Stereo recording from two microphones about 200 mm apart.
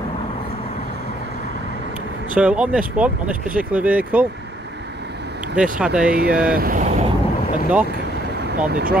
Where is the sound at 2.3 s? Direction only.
5° right (ahead or behind).